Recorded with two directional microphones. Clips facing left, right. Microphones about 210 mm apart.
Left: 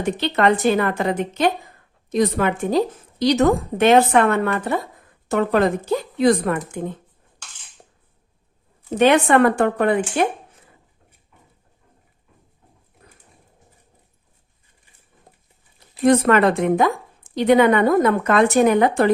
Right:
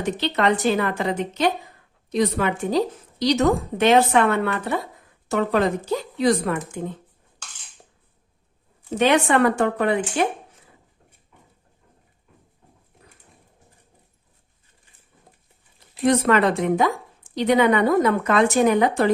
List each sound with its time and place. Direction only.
0.2 s a woman's voice: 55° left (ahead or behind)
9.0 s a woman's voice: 50° left (ahead or behind)
16.0 s a woman's voice: 50° left (ahead or behind)